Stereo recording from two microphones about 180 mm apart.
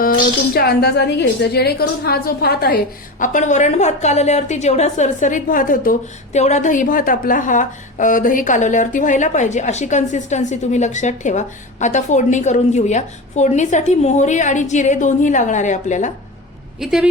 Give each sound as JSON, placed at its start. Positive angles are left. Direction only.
{"t": 0.0, "sound": "a woman's voice", "side_deg": 55}
{"t": 3.2, "sound": "a woman's voice", "side_deg": 45}
{"t": 16.8, "sound": "a woman's voice", "side_deg": 0}